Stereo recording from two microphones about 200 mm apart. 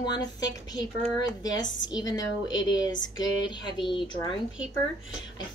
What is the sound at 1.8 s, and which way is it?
Speech, 20° left (ahead or behind).